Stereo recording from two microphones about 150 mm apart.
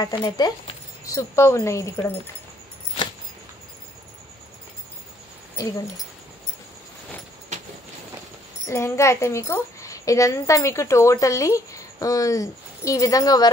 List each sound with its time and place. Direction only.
0.0 s speech: 25° left (ahead or behind)
8.6 s speech: 20° left (ahead or behind)